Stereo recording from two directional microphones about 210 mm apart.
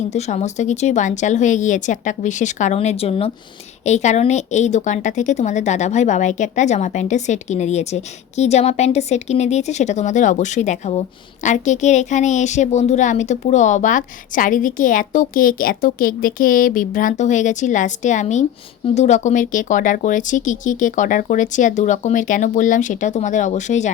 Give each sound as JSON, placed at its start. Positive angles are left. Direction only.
{"t": 0.1, "sound": "speech", "side_deg": 30}